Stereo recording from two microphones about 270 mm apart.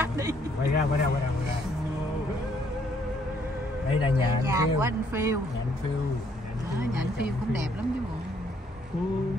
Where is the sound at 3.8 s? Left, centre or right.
Centre.